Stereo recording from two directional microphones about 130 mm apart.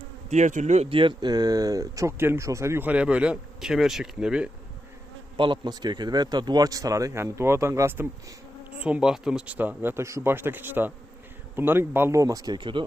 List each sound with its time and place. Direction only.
0.3 s speech: 65° right (ahead or behind)
0.9 s speech: 40° right (ahead or behind); by 4.5 s 5° right (ahead or behind)
5.4 s speech: 35° right (ahead or behind); by 8.1 s 20° right (ahead or behind)
8.8 s speech: 5° right (ahead or behind); by 12.8 s 40° right (ahead or behind)